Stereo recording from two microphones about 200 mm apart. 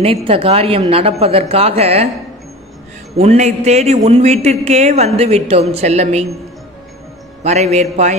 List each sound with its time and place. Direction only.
0.0 s a woman's voice: 30° right (ahead or behind)
3.2 s a man's voice: 35° right (ahead or behind)
7.4 s a man's voice: 35° right (ahead or behind)